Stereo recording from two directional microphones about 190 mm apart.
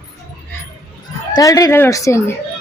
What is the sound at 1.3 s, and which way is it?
Speech, 20° left (ahead or behind).